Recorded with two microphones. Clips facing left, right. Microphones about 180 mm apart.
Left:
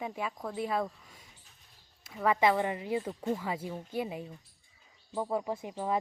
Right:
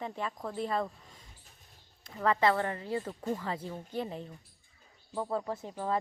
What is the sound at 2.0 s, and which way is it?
Speech, 10° left (ahead or behind).